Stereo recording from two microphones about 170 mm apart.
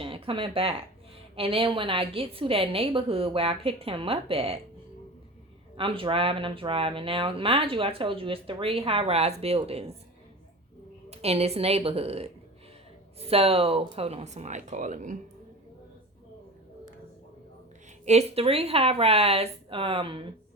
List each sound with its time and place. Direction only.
0.0 s speech: 30° right (ahead or behind)
5.7 s speech: 30° right (ahead or behind)
11.1 s speech: 35° right (ahead or behind)
18.0 s speech: 40° right (ahead or behind)